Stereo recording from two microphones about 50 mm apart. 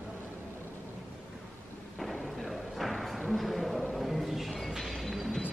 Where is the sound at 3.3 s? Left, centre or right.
Centre.